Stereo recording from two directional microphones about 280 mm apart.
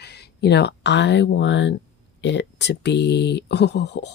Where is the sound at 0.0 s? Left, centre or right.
Left.